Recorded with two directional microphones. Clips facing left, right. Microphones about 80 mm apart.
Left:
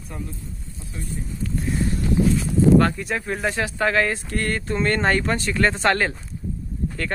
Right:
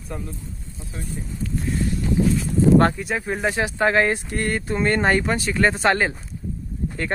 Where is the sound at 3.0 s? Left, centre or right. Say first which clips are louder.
Right 1 dB; centre.